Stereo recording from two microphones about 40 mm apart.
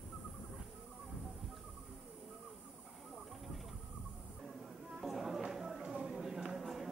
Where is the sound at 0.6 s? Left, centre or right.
Centre.